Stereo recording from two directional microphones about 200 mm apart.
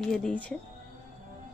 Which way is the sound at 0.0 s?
5° left (ahead or behind).